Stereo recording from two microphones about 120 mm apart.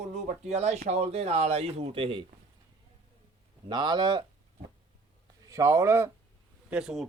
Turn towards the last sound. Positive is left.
turn(degrees=-5)  # may be behind; listen again after turning